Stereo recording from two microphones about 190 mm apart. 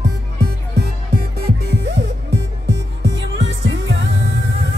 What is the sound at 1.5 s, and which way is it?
Music, 60° right (ahead or behind).